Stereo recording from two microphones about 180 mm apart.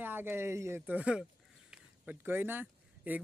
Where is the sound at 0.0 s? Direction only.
10° right (ahead or behind).